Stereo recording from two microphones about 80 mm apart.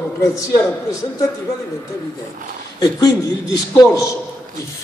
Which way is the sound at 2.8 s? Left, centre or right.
Left.